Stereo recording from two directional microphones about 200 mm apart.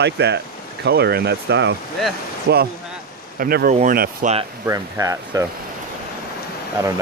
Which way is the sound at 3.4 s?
45° right (ahead or behind).